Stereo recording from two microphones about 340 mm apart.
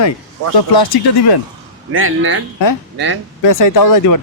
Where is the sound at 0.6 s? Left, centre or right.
Left.